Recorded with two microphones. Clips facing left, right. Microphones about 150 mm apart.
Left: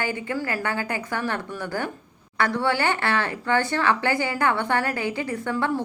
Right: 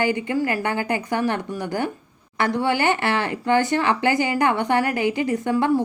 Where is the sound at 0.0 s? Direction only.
15° right (ahead or behind).